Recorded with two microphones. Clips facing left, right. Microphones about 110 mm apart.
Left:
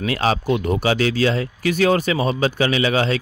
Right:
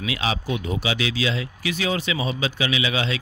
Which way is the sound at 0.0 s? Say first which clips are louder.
Left 6 dB; 45° left (ahead or behind).